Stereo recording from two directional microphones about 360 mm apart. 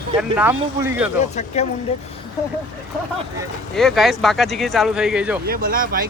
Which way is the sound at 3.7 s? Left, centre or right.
Centre.